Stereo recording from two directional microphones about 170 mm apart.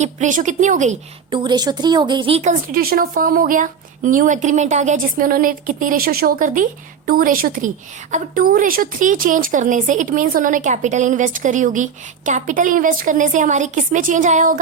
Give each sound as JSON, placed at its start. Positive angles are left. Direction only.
{"t": 0.0, "sound": "speech", "side_deg": -45}
{"t": 1.3, "sound": "speech", "side_deg": -25}